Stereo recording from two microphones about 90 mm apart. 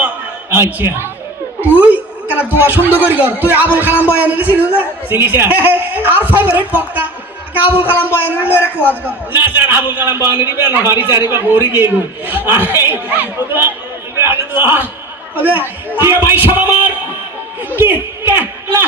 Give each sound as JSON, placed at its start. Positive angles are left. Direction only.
{"t": 0.5, "sound": "a man's voice", "side_deg": -25}
{"t": 1.6, "sound": "a sound", "side_deg": -20}
{"t": 2.3, "sound": "speech", "side_deg": 20}
{"t": 2.6, "sound": "a man's voice", "side_deg": -20}
{"t": 14.2, "sound": "a sound", "side_deg": -25}
{"t": 15.4, "sound": "a man's voice", "side_deg": -20}